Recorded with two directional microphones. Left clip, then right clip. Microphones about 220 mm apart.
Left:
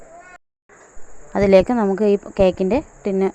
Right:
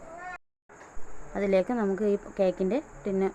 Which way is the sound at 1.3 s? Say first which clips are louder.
Left 12 dB; 35° left (ahead or behind).